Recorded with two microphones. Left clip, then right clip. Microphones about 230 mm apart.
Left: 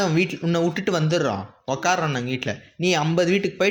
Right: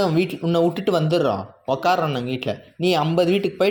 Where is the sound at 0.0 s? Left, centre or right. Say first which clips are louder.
Right 2 dB; left.